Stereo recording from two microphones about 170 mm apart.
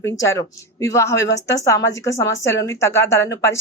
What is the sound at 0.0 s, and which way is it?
A woman's voice, 20° left (ahead or behind).